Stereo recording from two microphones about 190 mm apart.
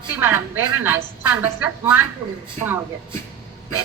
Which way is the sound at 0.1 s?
10° right (ahead or behind).